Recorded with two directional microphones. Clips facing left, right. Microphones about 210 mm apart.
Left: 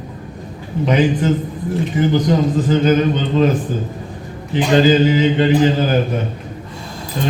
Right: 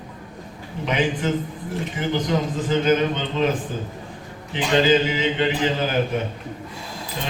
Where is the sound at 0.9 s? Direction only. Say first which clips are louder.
Left 7 dB; 40° left (ahead or behind).